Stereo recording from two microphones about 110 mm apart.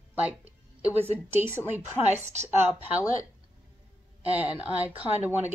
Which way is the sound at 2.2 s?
90° right.